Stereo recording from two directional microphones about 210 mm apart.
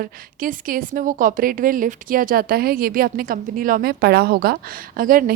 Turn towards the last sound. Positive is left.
turn(degrees=-40)  # may be behind; listen again after turning